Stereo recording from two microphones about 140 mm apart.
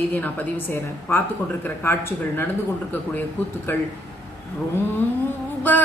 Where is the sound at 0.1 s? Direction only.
15° left (ahead or behind).